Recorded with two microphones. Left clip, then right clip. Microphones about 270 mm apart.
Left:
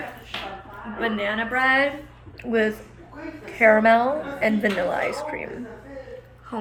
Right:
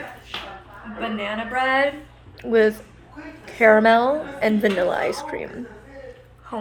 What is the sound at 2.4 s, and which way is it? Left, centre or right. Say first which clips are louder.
A woman's voice: right 5 dB; right.